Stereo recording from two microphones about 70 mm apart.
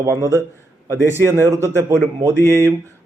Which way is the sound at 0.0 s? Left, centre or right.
Right.